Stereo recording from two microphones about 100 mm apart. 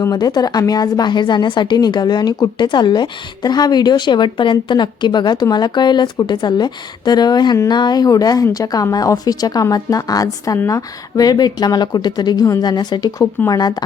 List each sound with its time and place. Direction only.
0.0 s a woman's voice: 40° left (ahead or behind)